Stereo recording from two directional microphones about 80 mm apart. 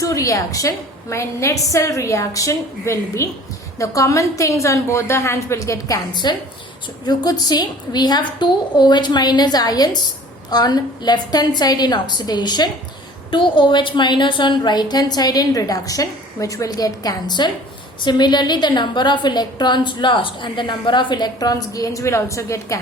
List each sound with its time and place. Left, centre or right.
0.0 s a woman's voice: left
6.2 s a woman's voice: left
13.3 s a woman's voice: left